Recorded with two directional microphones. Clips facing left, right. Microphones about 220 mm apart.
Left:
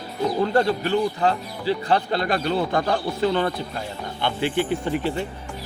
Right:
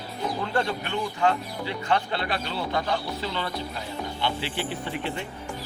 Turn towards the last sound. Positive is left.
turn(degrees=45)  # may be behind; listen again after turning